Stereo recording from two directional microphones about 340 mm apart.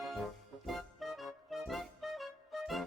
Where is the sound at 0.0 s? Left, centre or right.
Centre.